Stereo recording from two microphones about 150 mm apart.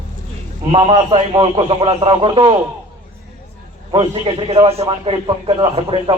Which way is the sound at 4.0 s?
40° right (ahead or behind).